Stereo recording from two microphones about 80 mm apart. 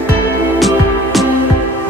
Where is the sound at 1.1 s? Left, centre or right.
Centre.